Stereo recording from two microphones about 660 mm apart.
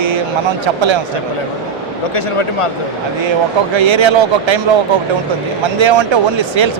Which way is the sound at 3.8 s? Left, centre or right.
Right.